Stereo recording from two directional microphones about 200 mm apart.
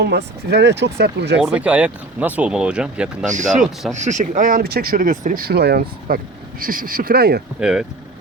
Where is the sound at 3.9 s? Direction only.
35° right (ahead or behind).